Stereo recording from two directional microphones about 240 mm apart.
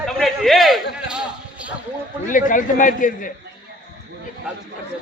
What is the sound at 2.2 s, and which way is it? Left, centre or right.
A man's voice, left.